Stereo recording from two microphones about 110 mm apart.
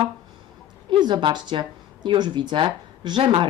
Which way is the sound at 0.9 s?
45° right (ahead or behind).